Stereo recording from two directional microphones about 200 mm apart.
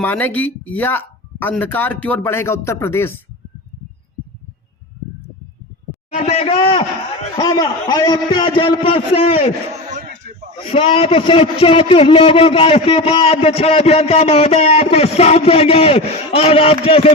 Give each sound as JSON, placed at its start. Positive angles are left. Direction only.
{"t": 0.0, "sound": "speech", "side_deg": 10}
{"t": 6.1, "sound": "a man's voice", "side_deg": 35}
{"t": 10.6, "sound": "a man's voice", "side_deg": 30}